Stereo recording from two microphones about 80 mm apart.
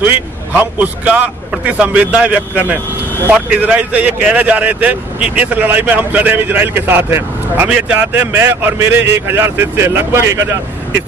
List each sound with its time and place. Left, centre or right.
0.0 s speech: right
7.6 s speech: centre; by 10.6 s right